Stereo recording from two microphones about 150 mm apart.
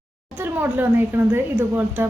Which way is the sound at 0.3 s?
15° right (ahead or behind).